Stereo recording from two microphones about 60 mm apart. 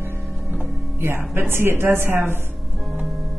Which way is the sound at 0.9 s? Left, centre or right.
Right.